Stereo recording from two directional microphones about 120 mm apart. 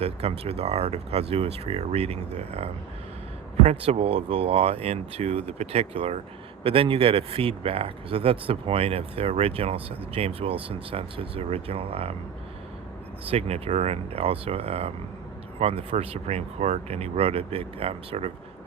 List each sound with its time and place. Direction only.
0.0 s speech: 55° right (ahead or behind)
6.6 s speech: 50° right (ahead or behind)
13.2 s speech: 55° right (ahead or behind)